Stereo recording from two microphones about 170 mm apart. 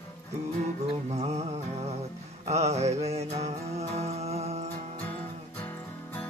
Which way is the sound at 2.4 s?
40° right (ahead or behind).